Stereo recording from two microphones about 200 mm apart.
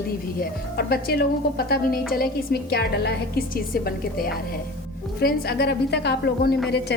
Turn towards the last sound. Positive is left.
turn(degrees=55)  # may be behind; listen again after turning